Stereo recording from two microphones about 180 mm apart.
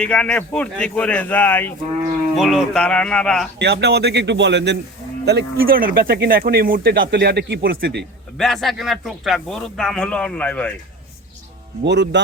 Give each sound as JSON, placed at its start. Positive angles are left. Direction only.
{"t": 0.0, "sound": "a man's voice", "side_deg": 5}
{"t": 3.6, "sound": "speech", "side_deg": -70}
{"t": 8.4, "sound": "speech", "side_deg": 0}
{"t": 11.9, "sound": "speech", "side_deg": -75}